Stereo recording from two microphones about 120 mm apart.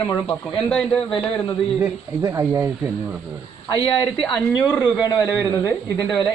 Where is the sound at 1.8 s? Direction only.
20° right (ahead or behind).